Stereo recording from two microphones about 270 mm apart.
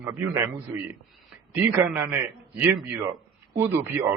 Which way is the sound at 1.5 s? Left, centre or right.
Centre.